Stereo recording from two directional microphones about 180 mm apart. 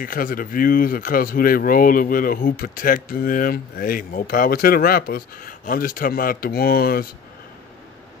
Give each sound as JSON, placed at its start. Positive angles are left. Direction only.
{"t": 0.0, "sound": "speech", "side_deg": 50}